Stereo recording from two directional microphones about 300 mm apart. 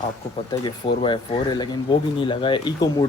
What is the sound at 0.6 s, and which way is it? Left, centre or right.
Speech, centre.